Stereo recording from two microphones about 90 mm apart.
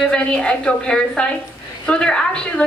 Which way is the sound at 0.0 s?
10° left (ahead or behind).